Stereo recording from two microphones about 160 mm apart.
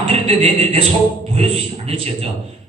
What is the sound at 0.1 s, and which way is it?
A woman's voice, 40° right (ahead or behind).